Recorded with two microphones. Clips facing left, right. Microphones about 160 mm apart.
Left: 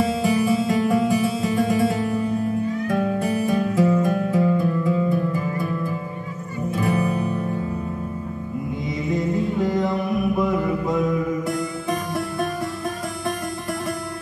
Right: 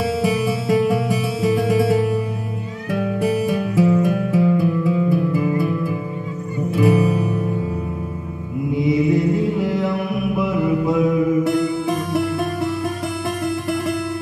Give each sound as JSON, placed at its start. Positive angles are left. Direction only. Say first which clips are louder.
{"t": 0.8, "sound": "music", "louder": "even", "side_deg": -5}
{"t": 3.5, "sound": "music", "louder": "right 2 dB", "side_deg": -5}
{"t": 6.9, "sound": "music", "louder": "right 3 dB", "side_deg": -10}
{"t": 8.8, "sound": "mantra", "louder": "right 8 dB", "side_deg": -5}